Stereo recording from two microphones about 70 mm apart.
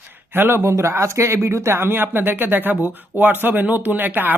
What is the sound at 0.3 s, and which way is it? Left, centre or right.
Speech, right.